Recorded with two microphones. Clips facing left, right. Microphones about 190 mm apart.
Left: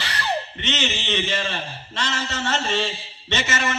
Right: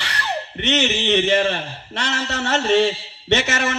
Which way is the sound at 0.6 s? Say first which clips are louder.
Right 7 dB; 60° right (ahead or behind).